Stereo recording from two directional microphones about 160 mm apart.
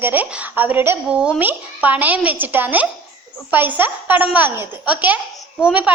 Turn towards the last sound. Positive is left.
turn(degrees=-10)  # may be behind; listen again after turning